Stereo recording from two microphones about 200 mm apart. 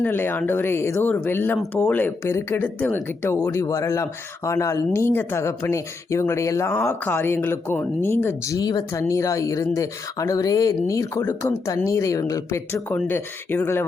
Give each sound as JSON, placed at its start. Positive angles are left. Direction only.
{"t": 0.0, "sound": "speech", "side_deg": 10}